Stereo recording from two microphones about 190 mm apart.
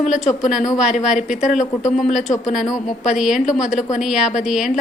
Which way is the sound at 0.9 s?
40° left (ahead or behind).